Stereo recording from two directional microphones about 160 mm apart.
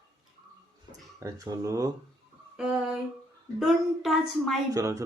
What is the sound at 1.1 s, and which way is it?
Speech, 20° right (ahead or behind).